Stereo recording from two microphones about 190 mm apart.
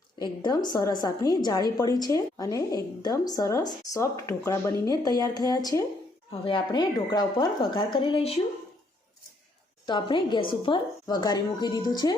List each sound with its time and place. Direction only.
0.2 s a woman's voice: 20° left (ahead or behind)
9.8 s a woman's voice: 25° left (ahead or behind)